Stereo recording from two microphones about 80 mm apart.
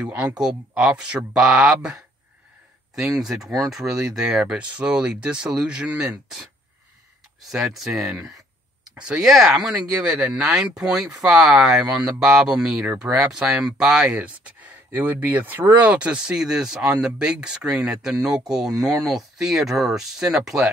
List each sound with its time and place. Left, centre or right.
0.4 s speech: centre
3.2 s speech: centre
7.4 s speech: centre
14.2 s speech: centre